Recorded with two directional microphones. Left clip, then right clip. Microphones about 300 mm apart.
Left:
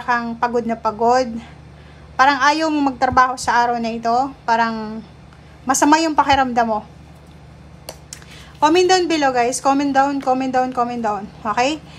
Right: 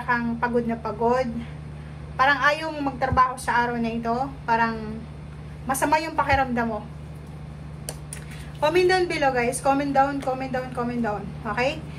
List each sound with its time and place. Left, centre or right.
0.0 s a woman's voice: centre
8.5 s a woman's voice: centre